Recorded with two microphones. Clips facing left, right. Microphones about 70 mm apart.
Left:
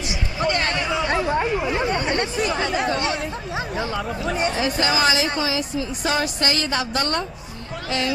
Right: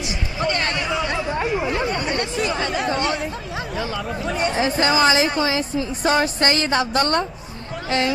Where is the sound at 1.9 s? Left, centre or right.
Left.